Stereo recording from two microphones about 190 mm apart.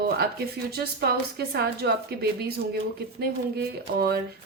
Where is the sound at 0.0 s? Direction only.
55° right (ahead or behind).